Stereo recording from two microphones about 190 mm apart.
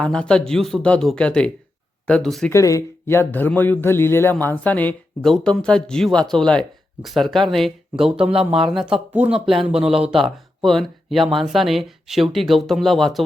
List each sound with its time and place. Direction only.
0.0 s speech: 5° left (ahead or behind)
2.5 s speech: 15° left (ahead or behind); by 8.2 s centre (ahead or behind)
8.2 s speech: 30° right (ahead or behind)
8.7 s speech: 5° right (ahead or behind)